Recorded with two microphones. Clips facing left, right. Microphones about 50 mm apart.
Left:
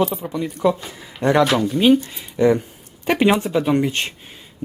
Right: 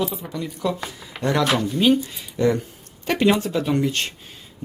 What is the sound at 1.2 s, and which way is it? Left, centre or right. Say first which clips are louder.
Speech: left 5 dB; right.